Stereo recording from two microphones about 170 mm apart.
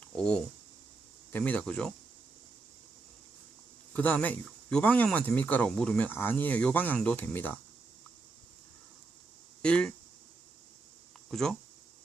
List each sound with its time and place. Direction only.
0.2 s speech: 5° left (ahead or behind)
3.9 s speech: 10° left (ahead or behind)
9.6 s speech: 5° left (ahead or behind)
11.3 s speech: 5° left (ahead or behind)